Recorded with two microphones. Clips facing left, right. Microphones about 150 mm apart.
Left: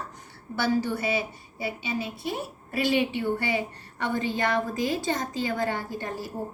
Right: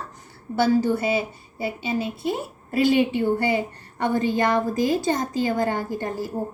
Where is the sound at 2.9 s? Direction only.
45° right (ahead or behind).